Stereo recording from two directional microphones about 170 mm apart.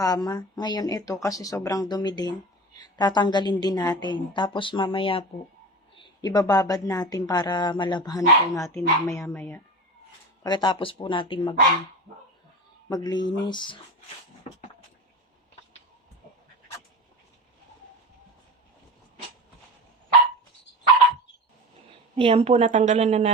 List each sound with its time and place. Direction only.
0.0 s speech: 20° left (ahead or behind)
6.2 s speech: 20° left (ahead or behind)
10.4 s speech: 25° left (ahead or behind)
12.9 s speech: 25° left (ahead or behind)
22.1 s a woman's voice: 35° right (ahead or behind)